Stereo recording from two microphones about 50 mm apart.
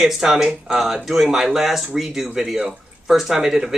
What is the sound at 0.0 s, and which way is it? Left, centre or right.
Speech, centre.